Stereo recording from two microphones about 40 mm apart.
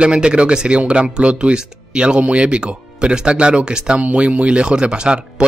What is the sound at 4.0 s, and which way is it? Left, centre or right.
Speech, right.